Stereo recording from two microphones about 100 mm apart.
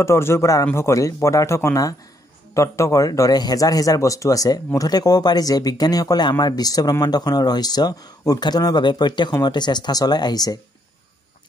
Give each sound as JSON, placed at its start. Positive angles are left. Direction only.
{"t": 0.0, "sound": "a man's voice", "side_deg": 25}